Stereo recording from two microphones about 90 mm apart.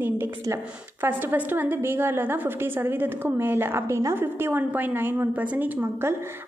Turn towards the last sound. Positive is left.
turn(degrees=-20)  # may be behind; listen again after turning